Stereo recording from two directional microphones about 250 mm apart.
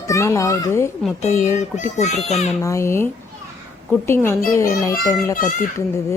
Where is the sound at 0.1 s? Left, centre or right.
Centre.